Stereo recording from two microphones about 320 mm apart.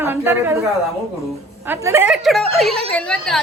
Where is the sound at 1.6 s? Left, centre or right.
Centre.